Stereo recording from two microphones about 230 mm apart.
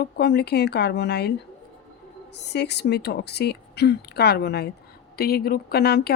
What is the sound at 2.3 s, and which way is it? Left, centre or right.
Speech, left.